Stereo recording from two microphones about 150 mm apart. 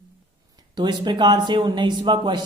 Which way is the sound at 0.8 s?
30° right (ahead or behind).